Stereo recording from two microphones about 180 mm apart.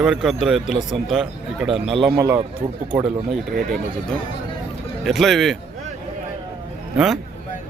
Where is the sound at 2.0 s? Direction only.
15° right (ahead or behind).